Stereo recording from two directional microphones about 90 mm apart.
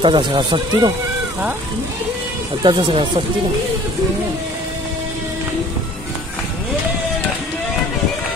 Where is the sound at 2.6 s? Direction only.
65° right (ahead or behind).